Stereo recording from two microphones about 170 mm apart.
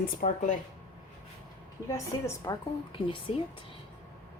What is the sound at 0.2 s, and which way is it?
Speech, 40° left (ahead or behind).